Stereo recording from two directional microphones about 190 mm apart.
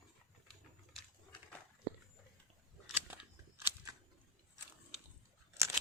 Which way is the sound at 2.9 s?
10° right (ahead or behind).